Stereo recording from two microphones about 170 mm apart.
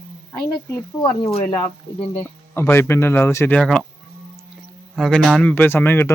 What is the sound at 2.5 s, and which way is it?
Speech, 15° left (ahead or behind).